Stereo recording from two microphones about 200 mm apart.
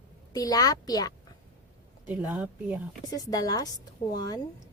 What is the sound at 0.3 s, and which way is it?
Speech, 20° left (ahead or behind).